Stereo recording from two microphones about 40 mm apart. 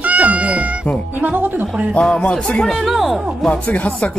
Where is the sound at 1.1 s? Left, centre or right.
Right.